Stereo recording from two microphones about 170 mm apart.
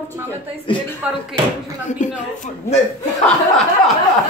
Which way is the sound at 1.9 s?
45° left (ahead or behind).